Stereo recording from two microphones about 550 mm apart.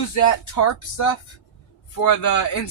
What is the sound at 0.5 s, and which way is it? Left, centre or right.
Speech, left.